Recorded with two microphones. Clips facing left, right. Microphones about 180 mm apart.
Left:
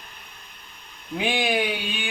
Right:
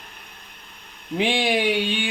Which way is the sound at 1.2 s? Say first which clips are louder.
Right 3 dB; 30° right (ahead or behind).